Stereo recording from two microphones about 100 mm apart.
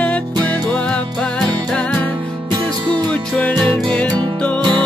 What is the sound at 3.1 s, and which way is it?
Music, 10° left (ahead or behind).